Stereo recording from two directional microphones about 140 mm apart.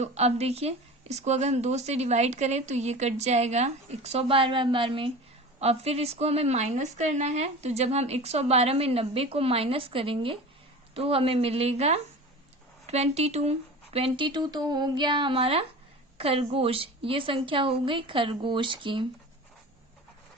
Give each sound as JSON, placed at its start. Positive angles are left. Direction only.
{"t": 0.0, "sound": "a woman's voice", "side_deg": -50}